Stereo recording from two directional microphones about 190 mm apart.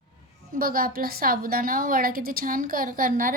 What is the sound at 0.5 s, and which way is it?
A woman's voice, 50° right (ahead or behind).